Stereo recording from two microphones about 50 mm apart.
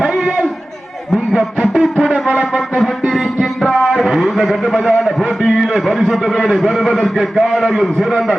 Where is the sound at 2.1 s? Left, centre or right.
Centre.